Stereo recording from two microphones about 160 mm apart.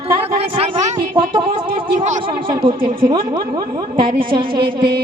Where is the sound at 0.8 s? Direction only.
35° right (ahead or behind).